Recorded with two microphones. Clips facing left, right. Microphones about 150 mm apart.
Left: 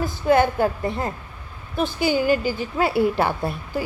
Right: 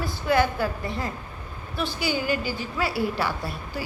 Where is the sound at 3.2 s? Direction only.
50° left (ahead or behind).